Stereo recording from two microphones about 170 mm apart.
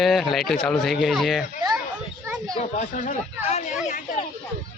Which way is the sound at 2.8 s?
50° left (ahead or behind).